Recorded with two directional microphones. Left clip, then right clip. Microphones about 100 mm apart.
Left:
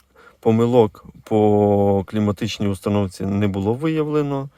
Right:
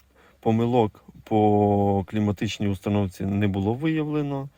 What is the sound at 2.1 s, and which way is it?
Speech, 35° left (ahead or behind).